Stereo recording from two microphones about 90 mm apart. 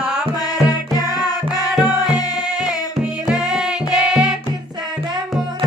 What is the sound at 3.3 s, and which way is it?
Music, 5° right (ahead or behind).